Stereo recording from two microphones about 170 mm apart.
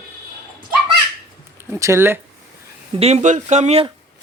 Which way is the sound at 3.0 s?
40° right (ahead or behind).